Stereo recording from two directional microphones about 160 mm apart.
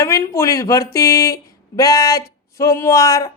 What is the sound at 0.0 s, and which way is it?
A woman's voice, 20° left (ahead or behind).